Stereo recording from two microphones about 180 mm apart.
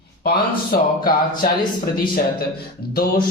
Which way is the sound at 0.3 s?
50° left (ahead or behind).